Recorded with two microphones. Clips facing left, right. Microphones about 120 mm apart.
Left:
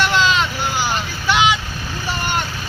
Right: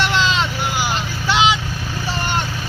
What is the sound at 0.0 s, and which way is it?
Vehicle, 25° right (ahead or behind).